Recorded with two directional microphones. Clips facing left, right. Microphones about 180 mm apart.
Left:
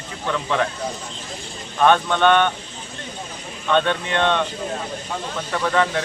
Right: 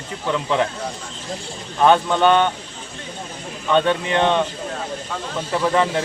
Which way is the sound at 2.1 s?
10° right (ahead or behind).